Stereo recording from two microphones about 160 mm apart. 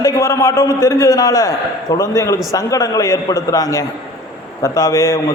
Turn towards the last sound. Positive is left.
turn(degrees=20)  # may be behind; listen again after turning